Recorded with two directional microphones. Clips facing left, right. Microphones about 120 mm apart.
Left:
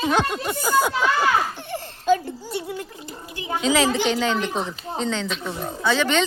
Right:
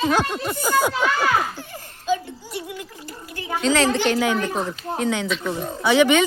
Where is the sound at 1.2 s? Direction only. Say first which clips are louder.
Even; 25° left (ahead or behind).